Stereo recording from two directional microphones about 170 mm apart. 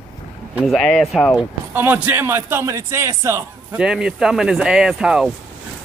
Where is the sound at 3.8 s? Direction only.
5° right (ahead or behind).